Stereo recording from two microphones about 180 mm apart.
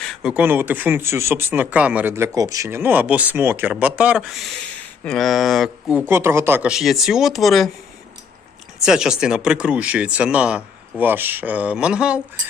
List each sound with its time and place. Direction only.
0.0 s speech: centre (ahead or behind)
8.8 s speech: 5° right (ahead or behind)